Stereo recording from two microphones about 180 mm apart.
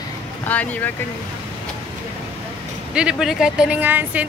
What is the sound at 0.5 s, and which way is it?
Speech, 10° left (ahead or behind).